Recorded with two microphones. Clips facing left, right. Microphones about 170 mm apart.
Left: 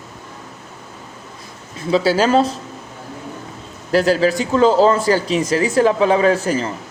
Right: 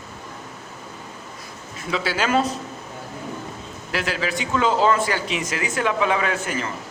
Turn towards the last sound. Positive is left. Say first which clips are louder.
# left 9 dB
turn(degrees=35)  # may be behind; listen again after turning